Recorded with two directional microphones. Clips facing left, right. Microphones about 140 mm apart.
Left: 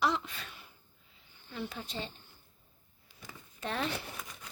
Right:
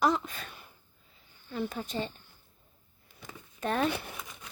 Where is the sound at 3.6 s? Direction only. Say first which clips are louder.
Right 6 dB; 50° right (ahead or behind).